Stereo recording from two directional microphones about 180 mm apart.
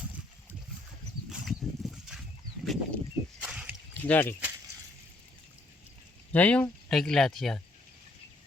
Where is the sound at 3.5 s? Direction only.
5° right (ahead or behind).